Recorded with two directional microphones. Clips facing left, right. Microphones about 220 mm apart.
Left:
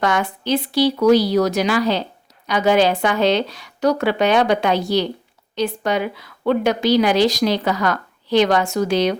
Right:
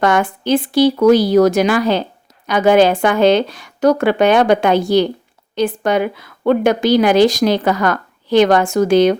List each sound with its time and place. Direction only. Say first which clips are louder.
0.0 s a woman's voice: right 5 dB; 50° right (ahead or behind)